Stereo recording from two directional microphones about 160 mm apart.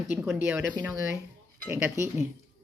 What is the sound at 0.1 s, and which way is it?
Speech, 10° right (ahead or behind).